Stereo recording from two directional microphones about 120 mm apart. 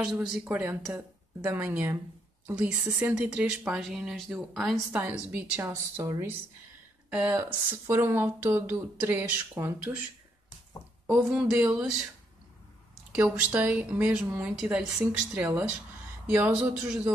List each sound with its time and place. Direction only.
0.0 s speech: 5° right (ahead or behind)
4.9 s speech: 15° right (ahead or behind)
7.1 s speech: 10° right (ahead or behind)
7.3 s speech: 25° right (ahead or behind)
11.1 s speech: 10° right (ahead or behind)
13.1 s speech: 10° right (ahead or behind)
14.5 s speech: centre (ahead or behind)
15.3 s speech: 15° right (ahead or behind)